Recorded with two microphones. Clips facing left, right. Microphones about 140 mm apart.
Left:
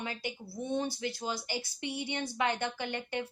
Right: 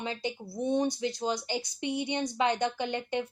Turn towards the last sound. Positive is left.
turn(degrees=-20)  # may be behind; listen again after turning